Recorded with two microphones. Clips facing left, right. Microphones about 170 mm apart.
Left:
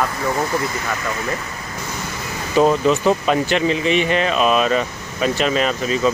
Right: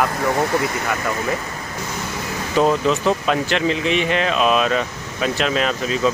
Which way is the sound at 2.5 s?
5° left (ahead or behind).